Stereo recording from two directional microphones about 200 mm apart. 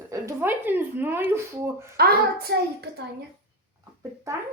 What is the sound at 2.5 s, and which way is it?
Speech, 55° right (ahead or behind).